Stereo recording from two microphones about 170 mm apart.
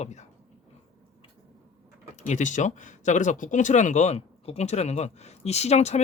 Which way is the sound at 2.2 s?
45° left (ahead or behind).